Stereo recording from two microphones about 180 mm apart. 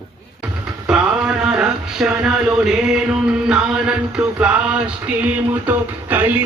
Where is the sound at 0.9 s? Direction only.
5° right (ahead or behind).